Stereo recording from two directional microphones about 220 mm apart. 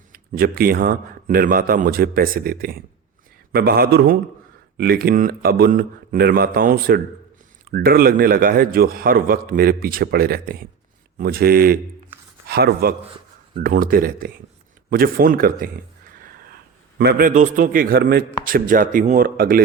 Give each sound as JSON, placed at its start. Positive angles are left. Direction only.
{"t": 0.1, "sound": "a man's voice", "side_deg": -45}
{"t": 17.0, "sound": "a man's voice", "side_deg": -45}